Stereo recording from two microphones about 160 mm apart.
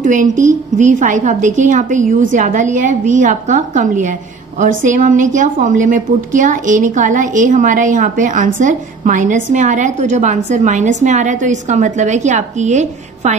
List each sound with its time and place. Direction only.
0.0 s a woman's voice: 55° right (ahead or behind)